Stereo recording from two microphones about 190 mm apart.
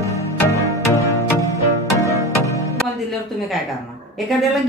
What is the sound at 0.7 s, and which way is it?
Music, 15° left (ahead or behind).